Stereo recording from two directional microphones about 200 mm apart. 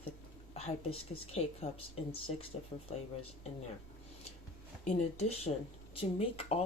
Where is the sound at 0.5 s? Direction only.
30° left (ahead or behind).